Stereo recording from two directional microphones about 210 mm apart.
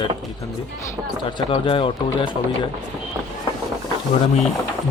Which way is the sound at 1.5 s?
25° left (ahead or behind).